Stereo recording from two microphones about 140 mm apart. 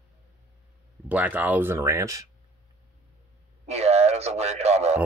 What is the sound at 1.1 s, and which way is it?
Speech, 10° right (ahead or behind).